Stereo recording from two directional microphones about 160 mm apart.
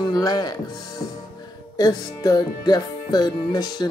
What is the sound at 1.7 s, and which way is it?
Speech, 25° left (ahead or behind).